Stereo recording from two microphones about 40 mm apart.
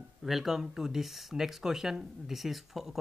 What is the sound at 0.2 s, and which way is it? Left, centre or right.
Speech, centre.